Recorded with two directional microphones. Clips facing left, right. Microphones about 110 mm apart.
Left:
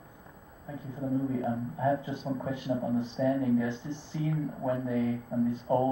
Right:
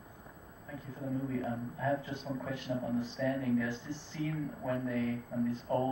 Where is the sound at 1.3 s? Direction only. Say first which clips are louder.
Left 5 dB; 20° left (ahead or behind).